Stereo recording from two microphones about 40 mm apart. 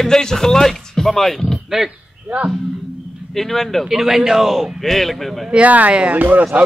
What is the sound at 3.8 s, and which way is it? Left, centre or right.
Speech, centre.